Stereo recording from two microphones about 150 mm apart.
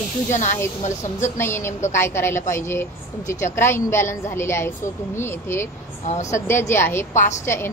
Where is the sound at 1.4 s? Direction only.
15° left (ahead or behind).